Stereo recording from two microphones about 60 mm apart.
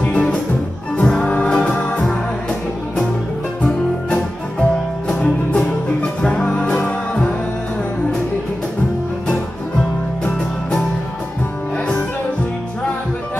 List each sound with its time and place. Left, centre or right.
0.0 s music: left
3.6 s music: centre
10.2 s music: centre